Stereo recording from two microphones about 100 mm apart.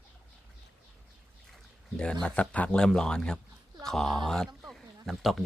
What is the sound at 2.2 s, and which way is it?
Speech, 10° left (ahead or behind).